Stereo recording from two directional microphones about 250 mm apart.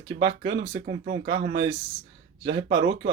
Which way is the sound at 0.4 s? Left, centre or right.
Right.